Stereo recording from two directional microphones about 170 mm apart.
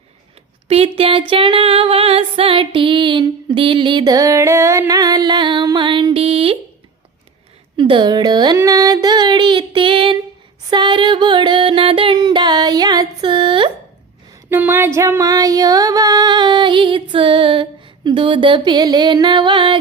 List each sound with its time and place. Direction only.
0.7 s music: 35° right (ahead or behind)
7.8 s speech: 30° right (ahead or behind)
10.7 s music: 25° right (ahead or behind)
14.5 s music: 15° right (ahead or behind); by 19.8 s 30° right (ahead or behind)